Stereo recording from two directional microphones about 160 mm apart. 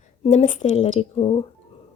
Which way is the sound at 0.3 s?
50° left (ahead or behind).